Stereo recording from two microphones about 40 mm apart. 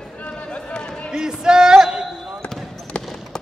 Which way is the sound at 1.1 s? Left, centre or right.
Centre.